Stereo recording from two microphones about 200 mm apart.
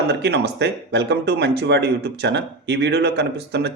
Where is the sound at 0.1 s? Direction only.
55° right (ahead or behind).